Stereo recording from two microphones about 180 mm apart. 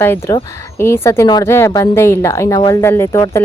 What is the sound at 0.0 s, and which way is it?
A woman's voice, 10° left (ahead or behind).